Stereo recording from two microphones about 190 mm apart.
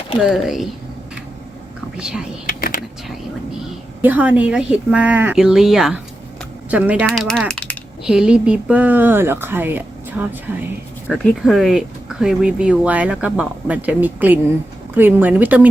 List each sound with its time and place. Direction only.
0.3 s speech: centre (ahead or behind)
2.0 s speech: 5° right (ahead or behind)
2.5 s typing: 50° left (ahead or behind)
4.0 s speech: 10° right (ahead or behind)
7.1 s speech: 5° left (ahead or behind)